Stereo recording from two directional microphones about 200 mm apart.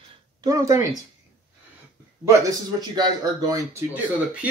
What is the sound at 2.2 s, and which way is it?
Speech, 15° right (ahead or behind).